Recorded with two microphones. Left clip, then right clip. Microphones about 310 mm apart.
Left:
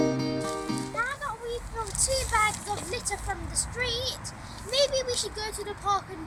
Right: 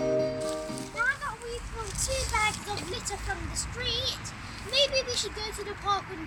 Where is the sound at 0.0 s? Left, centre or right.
Centre.